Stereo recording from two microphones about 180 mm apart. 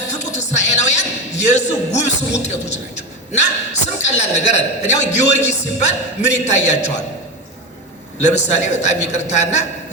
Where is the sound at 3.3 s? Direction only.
40° left (ahead or behind).